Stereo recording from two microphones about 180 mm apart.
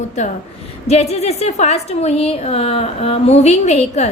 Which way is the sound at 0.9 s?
35° left (ahead or behind).